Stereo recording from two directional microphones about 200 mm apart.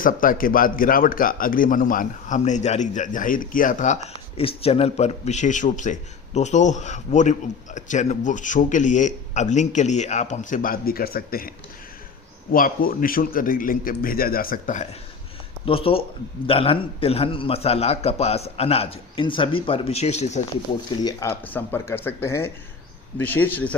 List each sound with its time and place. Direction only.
0.0 s a man's voice: 45° left (ahead or behind)
4.4 s a man's voice: 30° left (ahead or behind)
15.6 s a man's voice: 30° left (ahead or behind)
21.0 s speech: 15° left (ahead or behind)